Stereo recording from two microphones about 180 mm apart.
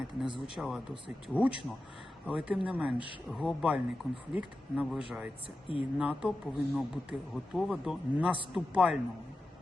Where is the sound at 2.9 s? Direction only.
30° left (ahead or behind).